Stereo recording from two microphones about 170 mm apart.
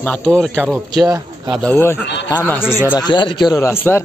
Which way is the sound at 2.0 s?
90° left.